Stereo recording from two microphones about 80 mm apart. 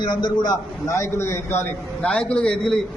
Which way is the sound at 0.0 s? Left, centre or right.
Left.